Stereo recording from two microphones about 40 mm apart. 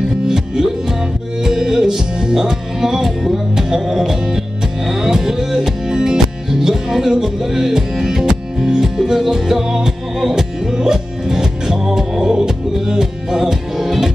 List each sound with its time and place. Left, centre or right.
0.3 s music: centre